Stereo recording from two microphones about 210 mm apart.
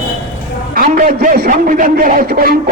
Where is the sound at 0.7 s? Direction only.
45° right (ahead or behind).